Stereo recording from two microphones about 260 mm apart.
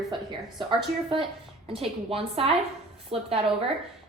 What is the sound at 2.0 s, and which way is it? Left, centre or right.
A woman's voice, right.